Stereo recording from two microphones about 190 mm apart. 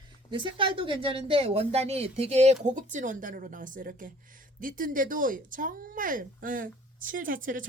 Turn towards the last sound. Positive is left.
turn(degrees=-45)  # may be behind; listen again after turning